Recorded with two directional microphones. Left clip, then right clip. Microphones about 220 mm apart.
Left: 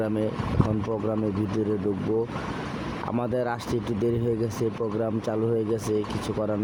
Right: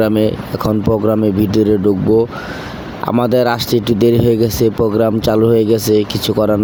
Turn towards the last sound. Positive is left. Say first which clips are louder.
# right 14 dB
turn(degrees=-40)  # may be behind; listen again after turning